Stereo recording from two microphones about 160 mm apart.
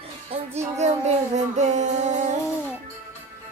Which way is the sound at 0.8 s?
45° right (ahead or behind).